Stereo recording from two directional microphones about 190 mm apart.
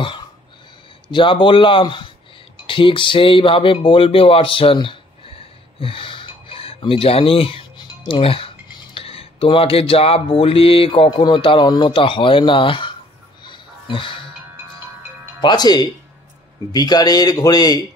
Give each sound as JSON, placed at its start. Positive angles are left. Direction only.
{"t": 1.0, "sound": "speech", "side_deg": 25}
{"t": 13.4, "sound": "music", "side_deg": 25}
{"t": 15.4, "sound": "speech", "side_deg": 20}